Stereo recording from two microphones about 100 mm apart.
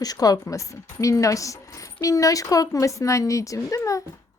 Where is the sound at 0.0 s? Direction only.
40° left (ahead or behind).